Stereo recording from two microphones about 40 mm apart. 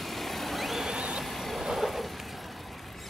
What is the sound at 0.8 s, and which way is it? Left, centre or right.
Vehicle, right.